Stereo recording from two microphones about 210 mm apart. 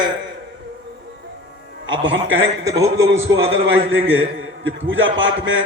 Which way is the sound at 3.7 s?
65° right (ahead or behind).